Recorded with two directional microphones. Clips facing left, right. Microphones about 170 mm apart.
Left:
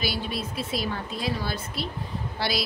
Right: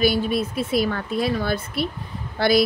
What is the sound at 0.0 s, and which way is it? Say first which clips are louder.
A woman's voice: right 10 dB; 50° right (ahead or behind).